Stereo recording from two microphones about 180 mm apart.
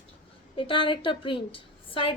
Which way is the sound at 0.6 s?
30° left (ahead or behind).